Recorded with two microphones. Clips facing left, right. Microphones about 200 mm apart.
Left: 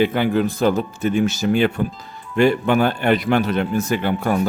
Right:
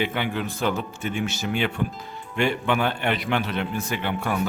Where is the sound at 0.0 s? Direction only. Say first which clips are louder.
Left 9 dB; 40° left (ahead or behind).